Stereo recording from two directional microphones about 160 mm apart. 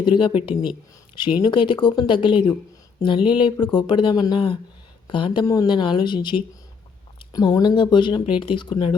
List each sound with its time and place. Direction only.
0.0 s speech: 30° left (ahead or behind)